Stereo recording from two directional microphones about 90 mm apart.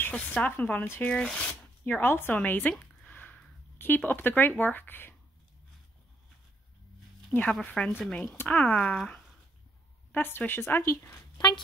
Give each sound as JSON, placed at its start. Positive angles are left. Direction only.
{"t": 0.0, "sound": "speech", "side_deg": 20}
{"t": 1.0, "sound": "speech", "side_deg": 10}
{"t": 1.9, "sound": "speech", "side_deg": 25}
{"t": 3.0, "sound": "a sound", "side_deg": 20}
{"t": 7.3, "sound": "speech", "side_deg": 5}
{"t": 10.1, "sound": "speech", "side_deg": 20}
{"t": 11.3, "sound": "speech", "side_deg": 50}